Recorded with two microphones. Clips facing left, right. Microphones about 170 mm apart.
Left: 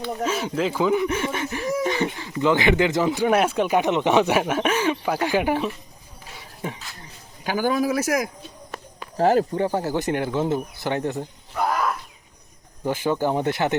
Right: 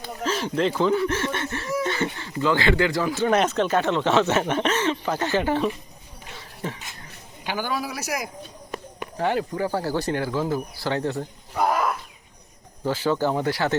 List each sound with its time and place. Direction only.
0.2 s speech: 10° left (ahead or behind)
6.3 s a sound: 10° left (ahead or behind)
7.4 s speech: 45° left (ahead or behind)
9.1 s speech: 40° left (ahead or behind)
9.6 s speech: 20° left (ahead or behind)
12.8 s speech: 15° left (ahead or behind)